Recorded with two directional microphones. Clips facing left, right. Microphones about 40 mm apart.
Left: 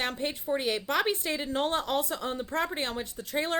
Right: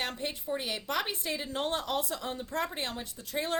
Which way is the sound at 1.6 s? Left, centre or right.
Left.